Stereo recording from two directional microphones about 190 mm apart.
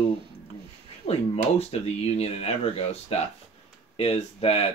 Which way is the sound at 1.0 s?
35° left (ahead or behind).